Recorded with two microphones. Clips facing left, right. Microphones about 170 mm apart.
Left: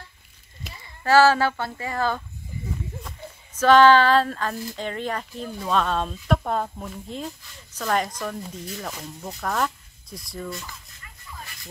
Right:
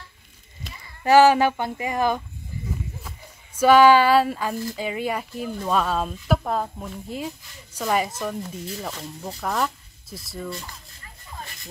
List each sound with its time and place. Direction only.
1.0 s speech: 15° right (ahead or behind)